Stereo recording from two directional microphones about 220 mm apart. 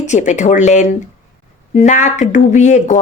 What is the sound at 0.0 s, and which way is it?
A woman's voice, 35° left (ahead or behind).